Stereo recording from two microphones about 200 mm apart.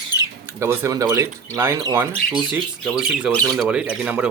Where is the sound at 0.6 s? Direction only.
15° right (ahead or behind).